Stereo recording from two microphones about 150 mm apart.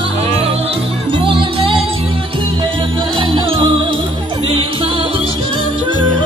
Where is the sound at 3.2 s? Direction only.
35° right (ahead or behind).